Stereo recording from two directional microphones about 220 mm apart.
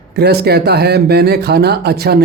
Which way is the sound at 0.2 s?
45° right (ahead or behind).